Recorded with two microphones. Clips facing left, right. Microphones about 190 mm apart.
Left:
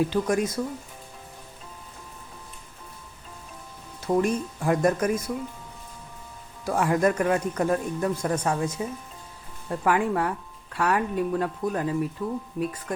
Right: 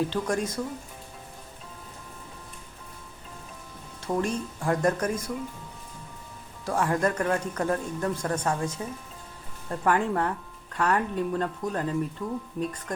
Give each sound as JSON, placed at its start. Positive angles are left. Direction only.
{"t": 0.1, "sound": "speech", "side_deg": 10}
{"t": 4.0, "sound": "speech", "side_deg": 10}
{"t": 6.7, "sound": "speech", "side_deg": 10}